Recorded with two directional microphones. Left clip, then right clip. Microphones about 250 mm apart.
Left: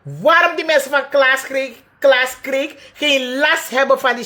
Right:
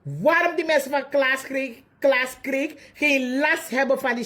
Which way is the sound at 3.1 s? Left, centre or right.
Left.